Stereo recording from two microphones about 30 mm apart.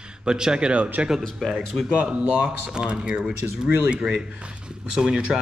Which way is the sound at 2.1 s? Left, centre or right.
Right.